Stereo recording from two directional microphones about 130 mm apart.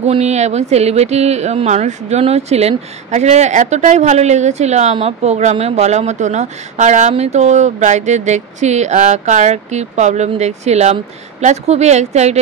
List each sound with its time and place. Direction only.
0.0 s speech: 55° right (ahead or behind)